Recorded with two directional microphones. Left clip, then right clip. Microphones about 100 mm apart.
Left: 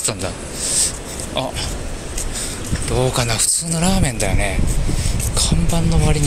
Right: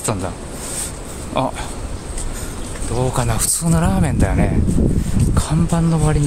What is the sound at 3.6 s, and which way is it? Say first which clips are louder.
Speech: even; 60° right (ahead or behind).